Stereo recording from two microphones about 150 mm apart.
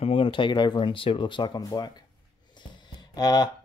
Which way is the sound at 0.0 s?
35° left (ahead or behind).